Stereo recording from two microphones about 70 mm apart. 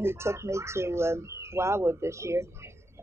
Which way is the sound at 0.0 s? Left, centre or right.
Right.